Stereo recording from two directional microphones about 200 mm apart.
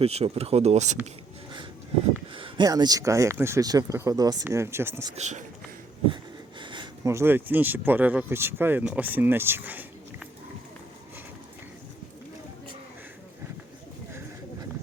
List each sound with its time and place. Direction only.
0.0 s speech: 30° right (ahead or behind)
2.3 s speech: 25° right (ahead or behind)
5.1 s speech: 35° right (ahead or behind)
6.6 s speech: 25° right (ahead or behind)